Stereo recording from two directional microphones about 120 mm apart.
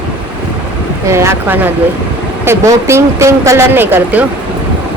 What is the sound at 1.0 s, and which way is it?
Speech, 25° right (ahead or behind).